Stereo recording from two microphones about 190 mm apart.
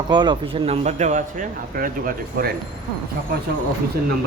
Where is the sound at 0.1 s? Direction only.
25° right (ahead or behind); by 2.5 s 50° right (ahead or behind).